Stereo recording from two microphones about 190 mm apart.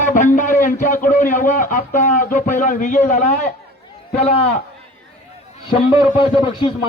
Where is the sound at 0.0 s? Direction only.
45° left (ahead or behind).